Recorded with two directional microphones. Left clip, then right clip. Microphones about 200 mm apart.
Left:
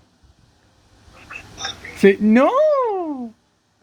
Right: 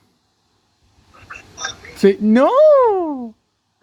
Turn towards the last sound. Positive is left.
turn(degrees=-25)  # may be behind; listen again after turning